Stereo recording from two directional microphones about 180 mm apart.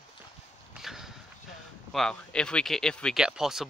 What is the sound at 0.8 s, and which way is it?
Speech, centre (ahead or behind).